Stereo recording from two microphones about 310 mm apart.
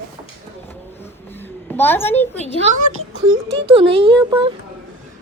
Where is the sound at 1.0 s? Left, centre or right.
Centre.